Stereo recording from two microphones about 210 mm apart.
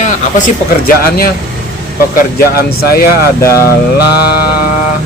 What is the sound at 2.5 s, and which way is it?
Mantra, 45° left (ahead or behind).